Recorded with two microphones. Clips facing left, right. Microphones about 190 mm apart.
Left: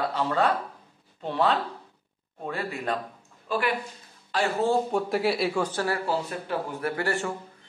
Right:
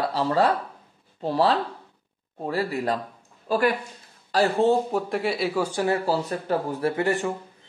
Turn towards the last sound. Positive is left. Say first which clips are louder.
# right 4 dB
turn(degrees=-20)  # may be behind; listen again after turning